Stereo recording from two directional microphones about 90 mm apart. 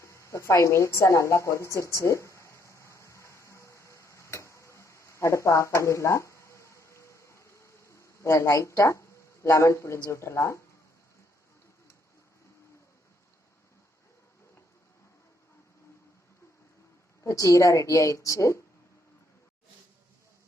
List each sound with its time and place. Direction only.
0.0 s a sound: 30° left (ahead or behind)
8.8 s speech: 35° left (ahead or behind)
17.2 s a woman's voice: 35° left (ahead or behind)